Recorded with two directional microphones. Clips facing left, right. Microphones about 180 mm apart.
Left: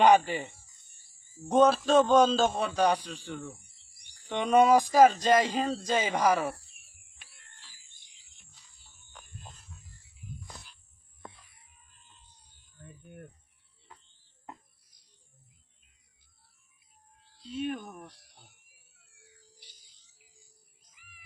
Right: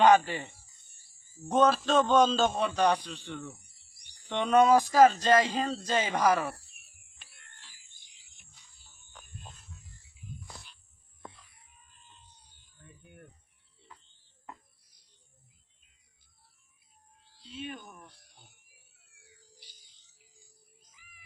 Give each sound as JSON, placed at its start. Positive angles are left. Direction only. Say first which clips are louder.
{"t": 0.0, "sound": "speech", "louder": "even", "side_deg": 15}
{"t": 3.5, "sound": "cricket", "louder": "left 2 dB", "side_deg": 25}
{"t": 4.3, "sound": "speech", "louder": "left 1 dB", "side_deg": 10}
{"t": 8.4, "sound": "music", "louder": "even", "side_deg": 0}
{"t": 10.5, "sound": "a sound", "louder": "even", "side_deg": 0}
{"t": 17.4, "sound": "speech", "louder": "left 8 dB", "side_deg": 50}